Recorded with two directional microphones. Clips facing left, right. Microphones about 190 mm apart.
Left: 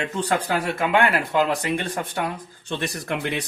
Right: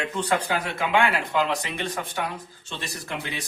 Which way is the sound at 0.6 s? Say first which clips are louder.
Left 3 dB; 55° left (ahead or behind).